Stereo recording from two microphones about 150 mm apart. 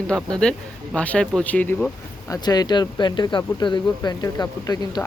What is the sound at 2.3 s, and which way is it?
Speech, 25° left (ahead or behind).